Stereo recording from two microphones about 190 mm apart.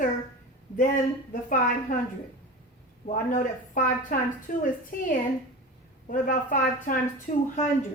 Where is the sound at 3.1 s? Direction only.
45° left (ahead or behind).